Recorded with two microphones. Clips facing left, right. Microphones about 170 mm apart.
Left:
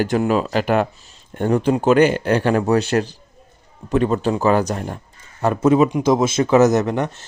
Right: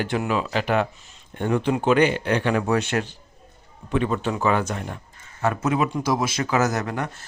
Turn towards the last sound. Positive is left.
turn(degrees=25)  # may be behind; listen again after turning